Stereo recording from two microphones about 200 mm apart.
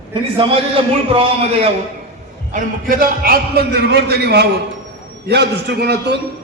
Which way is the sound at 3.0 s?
45° right (ahead or behind).